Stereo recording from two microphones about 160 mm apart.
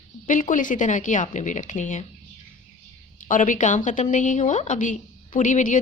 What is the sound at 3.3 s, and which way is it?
A woman's voice, 55° left (ahead or behind).